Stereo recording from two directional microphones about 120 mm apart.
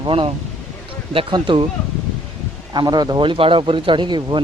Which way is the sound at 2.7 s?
35° right (ahead or behind).